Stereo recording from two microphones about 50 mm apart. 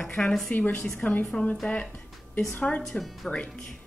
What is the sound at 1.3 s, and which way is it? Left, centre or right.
Speech, left.